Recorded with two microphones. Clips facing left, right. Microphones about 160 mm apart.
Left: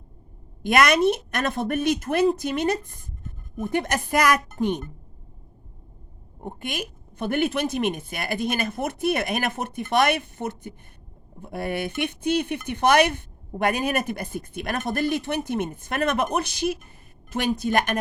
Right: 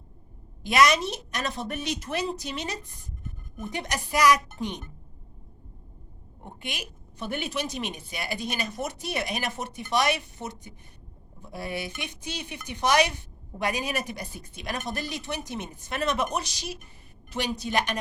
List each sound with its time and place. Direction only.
0.6 s a woman's voice: 55° left (ahead or behind)
6.4 s a woman's voice: 50° left (ahead or behind)